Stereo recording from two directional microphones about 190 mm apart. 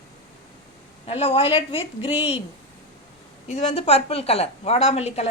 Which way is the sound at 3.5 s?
30° left (ahead or behind).